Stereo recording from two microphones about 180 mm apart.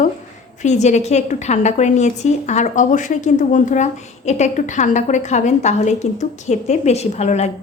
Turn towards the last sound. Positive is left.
turn(degrees=40)  # may be behind; listen again after turning